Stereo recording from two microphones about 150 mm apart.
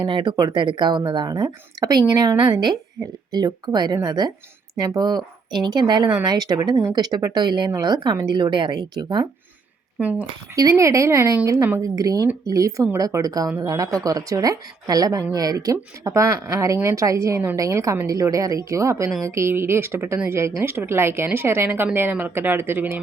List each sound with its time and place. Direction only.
0.0 s a woman's voice: 35° right (ahead or behind)
10.0 s speech: 10° right (ahead or behind)
10.5 s a woman's voice: 20° right (ahead or behind)